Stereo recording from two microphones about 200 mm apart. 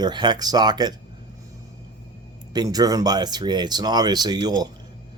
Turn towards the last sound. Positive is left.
turn(degrees=-20)  # may be behind; listen again after turning